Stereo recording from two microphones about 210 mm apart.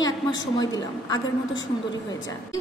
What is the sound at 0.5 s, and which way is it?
Speech, 15° left (ahead or behind).